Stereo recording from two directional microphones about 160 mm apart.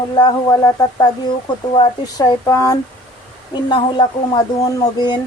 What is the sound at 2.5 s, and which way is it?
A woman's voice, 20° left (ahead or behind).